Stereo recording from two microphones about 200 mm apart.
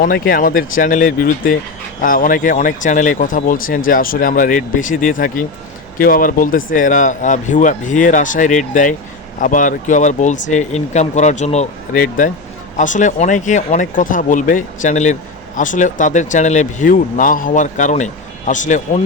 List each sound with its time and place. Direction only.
0.0 s speech: 45° left (ahead or behind)